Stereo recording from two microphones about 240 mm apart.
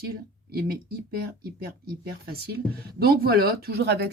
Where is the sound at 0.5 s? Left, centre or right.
Right.